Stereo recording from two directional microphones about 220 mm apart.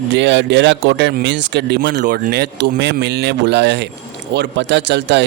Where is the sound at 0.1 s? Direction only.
55° right (ahead or behind).